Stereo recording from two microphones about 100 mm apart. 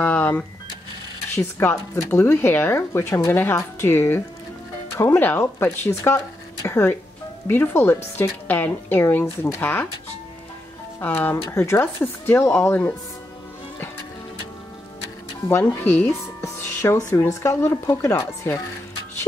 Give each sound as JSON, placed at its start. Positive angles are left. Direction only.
{"t": 0.0, "sound": "cash register", "side_deg": 20}
{"t": 1.3, "sound": "a woman's voice", "side_deg": 25}
{"t": 3.3, "sound": "a woman's voice", "side_deg": 20}
{"t": 11.0, "sound": "a woman's voice", "side_deg": 20}
{"t": 15.6, "sound": "speech", "side_deg": 15}
{"t": 16.8, "sound": "a woman's voice", "side_deg": 35}